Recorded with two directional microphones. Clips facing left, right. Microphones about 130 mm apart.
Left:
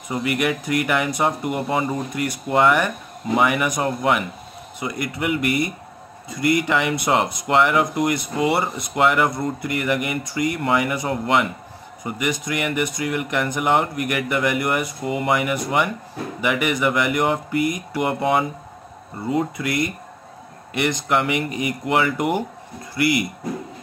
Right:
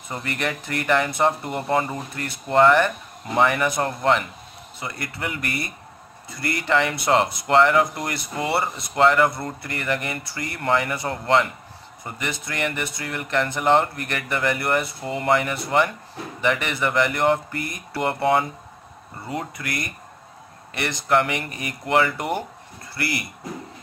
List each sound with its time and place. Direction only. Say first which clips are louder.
0.1 s speech: left 6 dB; 10° left (ahead or behind)